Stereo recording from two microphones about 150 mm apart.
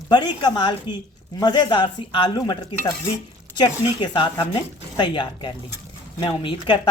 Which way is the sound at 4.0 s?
30° left (ahead or behind).